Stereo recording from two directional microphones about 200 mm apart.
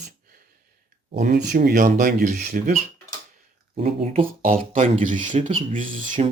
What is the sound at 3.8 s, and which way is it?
Speech, 30° right (ahead or behind).